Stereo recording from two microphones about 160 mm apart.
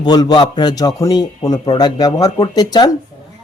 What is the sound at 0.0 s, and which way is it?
A man's voice, 25° left (ahead or behind).